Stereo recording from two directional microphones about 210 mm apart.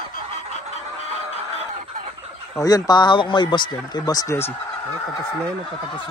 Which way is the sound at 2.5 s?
15° left (ahead or behind).